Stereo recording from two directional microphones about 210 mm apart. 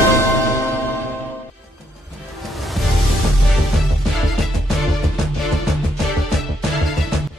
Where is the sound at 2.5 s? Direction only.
Centre (ahead or behind).